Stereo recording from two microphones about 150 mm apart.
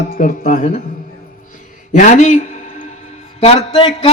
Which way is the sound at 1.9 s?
55° left (ahead or behind).